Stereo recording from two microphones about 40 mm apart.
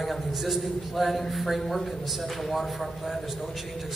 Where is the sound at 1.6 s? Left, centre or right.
Centre.